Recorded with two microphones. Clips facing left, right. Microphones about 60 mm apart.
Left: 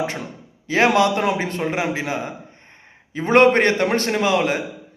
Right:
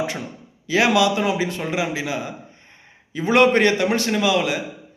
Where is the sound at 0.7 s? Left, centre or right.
Left.